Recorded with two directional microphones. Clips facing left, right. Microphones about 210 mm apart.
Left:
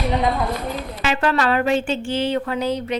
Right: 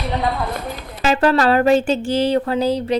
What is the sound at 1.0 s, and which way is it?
Speech, 40° right (ahead or behind).